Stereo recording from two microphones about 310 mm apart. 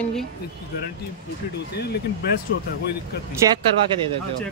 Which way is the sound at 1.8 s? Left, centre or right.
Left.